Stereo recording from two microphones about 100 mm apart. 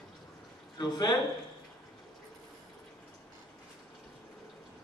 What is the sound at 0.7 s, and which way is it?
Speech, 45° left (ahead or behind).